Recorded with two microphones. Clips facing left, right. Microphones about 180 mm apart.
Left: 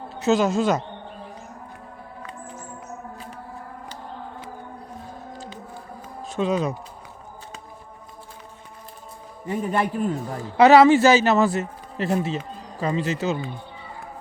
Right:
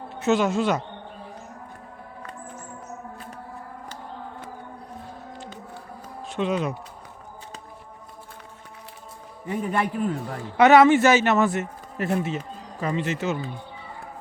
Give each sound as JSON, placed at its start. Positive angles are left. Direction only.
{"t": 0.1, "sound": "speech", "side_deg": 35}
{"t": 5.0, "sound": "a sound", "side_deg": 40}
{"t": 6.2, "sound": "speech", "side_deg": 40}
{"t": 9.5, "sound": "a man's voice", "side_deg": 35}